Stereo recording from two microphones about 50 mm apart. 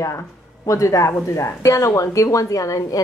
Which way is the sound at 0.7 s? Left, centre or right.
Left.